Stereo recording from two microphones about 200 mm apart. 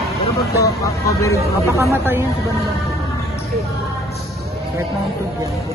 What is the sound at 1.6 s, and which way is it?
Speech, 15° right (ahead or behind).